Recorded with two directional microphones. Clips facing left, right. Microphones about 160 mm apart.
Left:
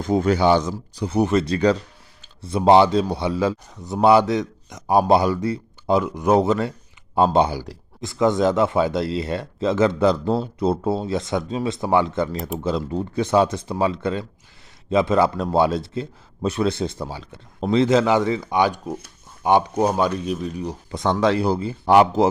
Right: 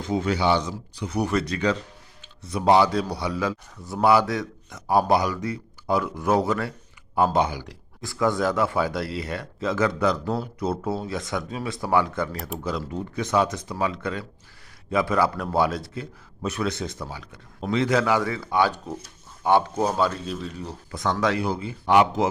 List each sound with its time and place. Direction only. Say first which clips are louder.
0.0 s speech: left 5 dB; 45° left (ahead or behind)
1.1 s speech: left 5 dB; 25° left (ahead or behind)
8.0 s speech: left 5 dB; 20° left (ahead or behind)
20.9 s speech: left 5 dB; 25° left (ahead or behind)